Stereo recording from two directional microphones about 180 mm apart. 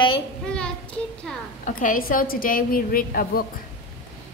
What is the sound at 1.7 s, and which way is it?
A woman's voice, 50° left (ahead or behind).